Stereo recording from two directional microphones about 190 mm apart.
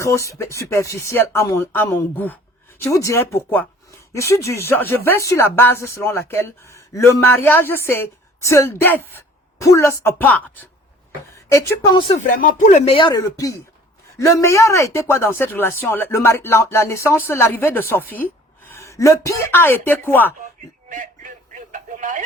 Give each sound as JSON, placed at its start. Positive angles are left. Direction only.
{"t": 0.0, "sound": "speech", "side_deg": 15}
{"t": 12.1, "sound": "speech", "side_deg": 45}
{"t": 20.9, "sound": "a sound", "side_deg": -40}